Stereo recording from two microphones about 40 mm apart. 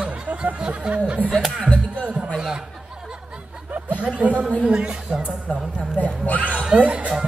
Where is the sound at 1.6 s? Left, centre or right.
Left.